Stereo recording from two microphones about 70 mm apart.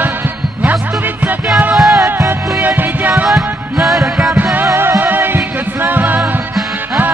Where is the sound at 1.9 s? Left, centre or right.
Right.